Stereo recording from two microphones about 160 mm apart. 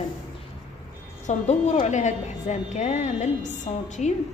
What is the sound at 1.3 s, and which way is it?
A woman's voice, 45° left (ahead or behind).